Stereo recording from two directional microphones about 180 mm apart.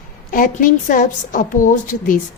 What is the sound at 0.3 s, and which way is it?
A woman's voice, 50° left (ahead or behind).